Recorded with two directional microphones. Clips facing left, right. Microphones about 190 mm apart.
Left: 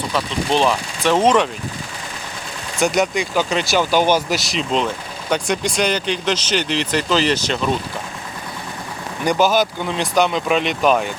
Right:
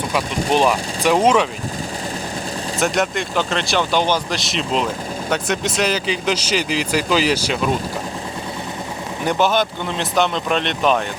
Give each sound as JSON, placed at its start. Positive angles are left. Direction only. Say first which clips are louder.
{"t": 0.1, "sound": "speech", "louder": "right 1 dB", "side_deg": -10}
{"t": 2.8, "sound": "speech", "louder": "left 3 dB", "side_deg": 0}
{"t": 9.2, "sound": "speech", "louder": "left 2 dB", "side_deg": 0}